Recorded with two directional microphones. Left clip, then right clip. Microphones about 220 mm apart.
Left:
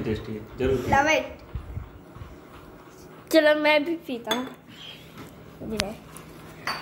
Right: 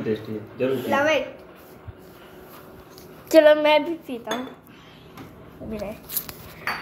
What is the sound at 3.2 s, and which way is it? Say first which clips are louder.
Speech: right 4 dB; centre (ahead or behind).